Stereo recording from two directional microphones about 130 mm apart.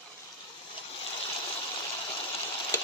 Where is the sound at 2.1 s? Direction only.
45° left (ahead or behind).